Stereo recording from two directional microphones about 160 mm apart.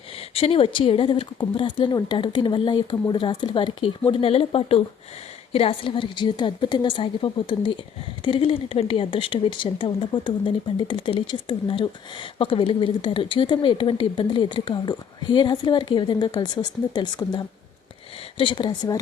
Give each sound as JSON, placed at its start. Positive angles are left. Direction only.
{"t": 0.3, "sound": "speech", "side_deg": 35}